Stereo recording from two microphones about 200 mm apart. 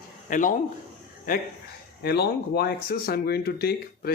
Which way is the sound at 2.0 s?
55° left (ahead or behind).